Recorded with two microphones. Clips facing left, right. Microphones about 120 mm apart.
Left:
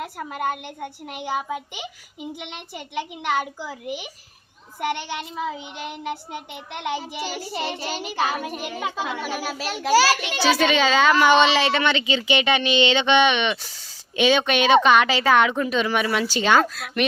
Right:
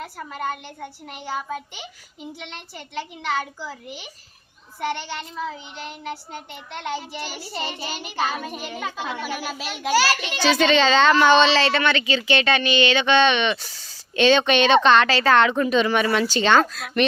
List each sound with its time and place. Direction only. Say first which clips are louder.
0.0 s a child's voice: left 2 dB; 15° left (ahead or behind)